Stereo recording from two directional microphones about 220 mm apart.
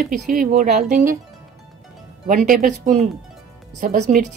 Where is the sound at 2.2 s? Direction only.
35° right (ahead or behind).